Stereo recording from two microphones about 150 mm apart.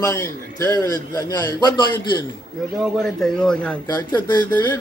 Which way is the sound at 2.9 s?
5° left (ahead or behind).